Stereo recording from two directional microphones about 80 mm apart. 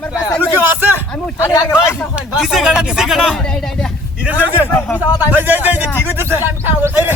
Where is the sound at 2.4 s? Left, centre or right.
Centre.